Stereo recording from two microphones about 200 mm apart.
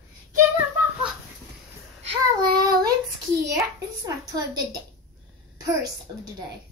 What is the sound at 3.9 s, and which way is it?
Speech, 20° right (ahead or behind).